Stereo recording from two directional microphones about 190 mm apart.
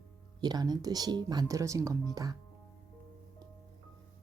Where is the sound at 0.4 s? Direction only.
20° right (ahead or behind).